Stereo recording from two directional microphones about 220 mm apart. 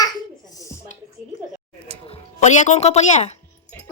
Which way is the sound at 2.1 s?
30° left (ahead or behind).